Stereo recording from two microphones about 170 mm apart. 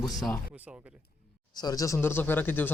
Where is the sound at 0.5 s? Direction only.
10° right (ahead or behind).